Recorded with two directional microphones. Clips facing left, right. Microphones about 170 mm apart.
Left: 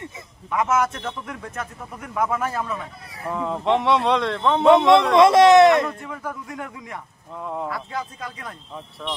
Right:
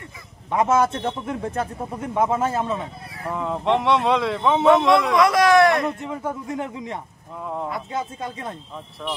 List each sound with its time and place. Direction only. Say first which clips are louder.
0.5 s speech: right 3 dB; 30° right (ahead or behind)
3.3 s speech: even; centre (ahead or behind)
5.1 s speech: left 6 dB; 25° left (ahead or behind)
5.9 s speech: right 4 dB; 25° right (ahead or behind)
7.3 s speech: even; centre (ahead or behind)
7.6 s speech: right 2 dB; 20° right (ahead or behind)
9.0 s speech: right 1 dB; 5° right (ahead or behind)